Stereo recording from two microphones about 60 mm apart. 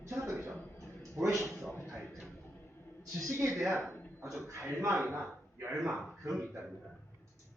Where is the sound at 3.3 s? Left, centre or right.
Right.